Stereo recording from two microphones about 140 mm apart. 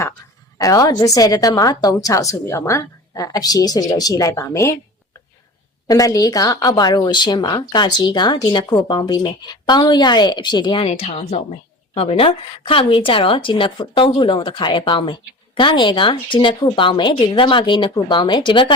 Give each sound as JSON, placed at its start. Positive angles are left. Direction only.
{"t": 0.6, "sound": "a woman's voice", "side_deg": 25}
{"t": 5.9, "sound": "speech", "side_deg": 25}